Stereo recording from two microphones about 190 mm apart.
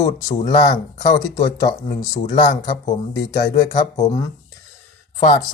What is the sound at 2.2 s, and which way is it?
Speech, 40° left (ahead or behind).